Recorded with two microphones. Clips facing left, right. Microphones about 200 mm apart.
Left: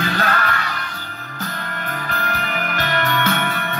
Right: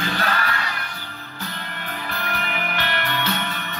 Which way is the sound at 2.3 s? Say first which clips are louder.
Left 1 dB; 45° left (ahead or behind).